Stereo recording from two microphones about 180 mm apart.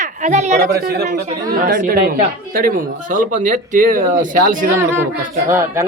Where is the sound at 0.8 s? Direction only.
65° right (ahead or behind); by 4.7 s 45° right (ahead or behind).